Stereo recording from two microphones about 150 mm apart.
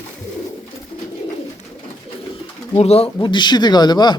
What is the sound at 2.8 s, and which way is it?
A man's voice, 40° left (ahead or behind).